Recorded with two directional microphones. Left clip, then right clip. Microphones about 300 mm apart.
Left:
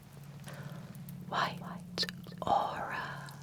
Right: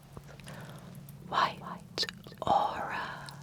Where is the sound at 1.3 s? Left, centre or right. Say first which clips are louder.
Right 5 dB; centre.